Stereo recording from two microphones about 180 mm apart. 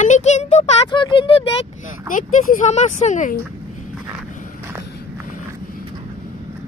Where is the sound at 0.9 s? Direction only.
25° left (ahead or behind).